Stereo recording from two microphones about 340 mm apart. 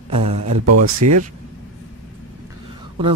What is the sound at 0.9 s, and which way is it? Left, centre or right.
Speech, right.